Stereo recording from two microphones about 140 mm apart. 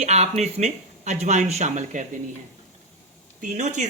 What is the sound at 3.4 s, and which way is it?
Speech, 60° right (ahead or behind).